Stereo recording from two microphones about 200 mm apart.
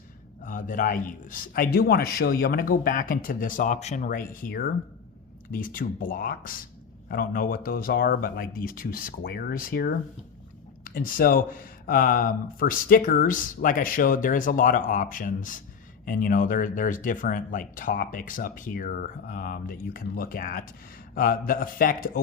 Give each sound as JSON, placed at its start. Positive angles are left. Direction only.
{"t": 0.4, "sound": "speech", "side_deg": 40}
{"t": 10.9, "sound": "speech", "side_deg": 45}